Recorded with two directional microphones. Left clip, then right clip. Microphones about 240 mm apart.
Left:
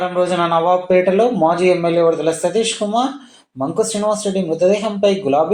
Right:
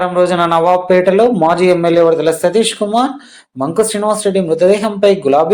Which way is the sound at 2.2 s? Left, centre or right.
Right.